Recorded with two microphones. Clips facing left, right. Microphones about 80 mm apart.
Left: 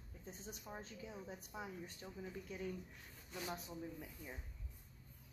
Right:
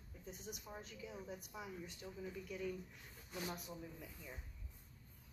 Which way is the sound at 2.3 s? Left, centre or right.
Left.